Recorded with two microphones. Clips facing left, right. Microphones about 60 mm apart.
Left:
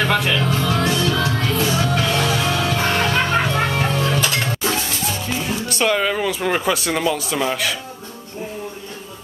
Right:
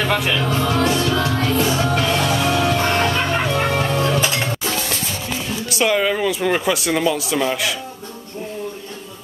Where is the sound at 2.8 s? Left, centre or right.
Centre.